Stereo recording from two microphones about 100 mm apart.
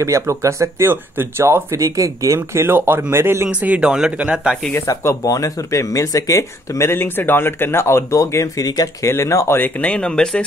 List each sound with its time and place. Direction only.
0.0 s speech: 30° right (ahead or behind)
3.4 s speech: 10° right (ahead or behind)
4.8 s speech: 35° left (ahead or behind)
9.8 s speech: 10° left (ahead or behind)